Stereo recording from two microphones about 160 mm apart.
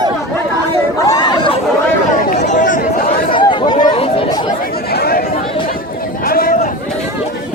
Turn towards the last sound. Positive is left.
turn(degrees=65)  # may be behind; listen again after turning